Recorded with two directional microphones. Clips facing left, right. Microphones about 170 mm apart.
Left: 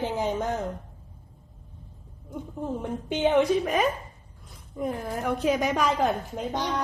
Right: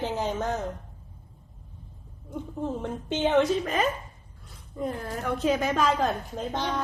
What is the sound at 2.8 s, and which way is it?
A woman's voice, 10° left (ahead or behind).